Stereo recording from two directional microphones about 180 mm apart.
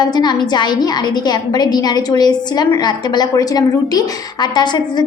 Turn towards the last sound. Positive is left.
turn(degrees=25)  # may be behind; listen again after turning